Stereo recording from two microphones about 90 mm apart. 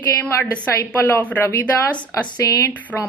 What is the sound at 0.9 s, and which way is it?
Speech, 25° left (ahead or behind).